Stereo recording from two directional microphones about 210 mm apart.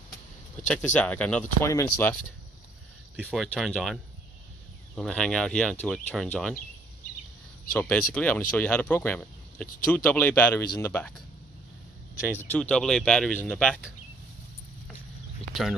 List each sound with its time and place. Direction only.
0.9 s speech: 5° left (ahead or behind)
3.2 s speech: 5° left (ahead or behind)
7.7 s speech: 5° left (ahead or behind)
12.4 s speech: 5° left (ahead or behind)